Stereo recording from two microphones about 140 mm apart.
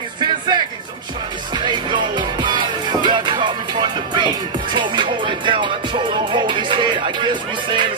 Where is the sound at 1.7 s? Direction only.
35° right (ahead or behind).